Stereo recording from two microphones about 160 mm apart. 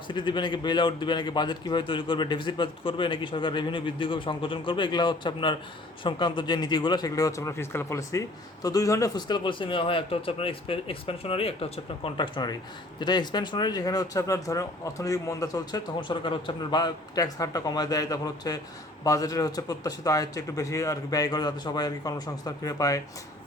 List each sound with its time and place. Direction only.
0.1 s speech: 30° left (ahead or behind)